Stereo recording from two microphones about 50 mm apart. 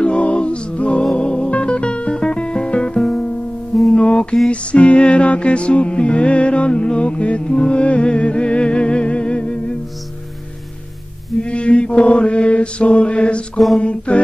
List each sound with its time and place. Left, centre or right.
0.0 s music: left
3.9 s mantra: centre
4.5 s music: left
11.4 s mantra: left
13.7 s a sound: left